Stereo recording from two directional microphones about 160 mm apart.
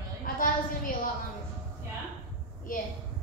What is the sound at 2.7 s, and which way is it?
Speech, 60° left (ahead or behind).